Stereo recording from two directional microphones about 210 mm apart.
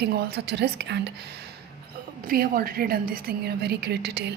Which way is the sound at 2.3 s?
45° right (ahead or behind).